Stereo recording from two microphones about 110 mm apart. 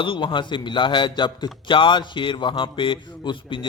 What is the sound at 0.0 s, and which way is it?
Speech, 50° left (ahead or behind).